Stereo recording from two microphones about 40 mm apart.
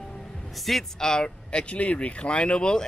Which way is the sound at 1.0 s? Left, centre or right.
Centre.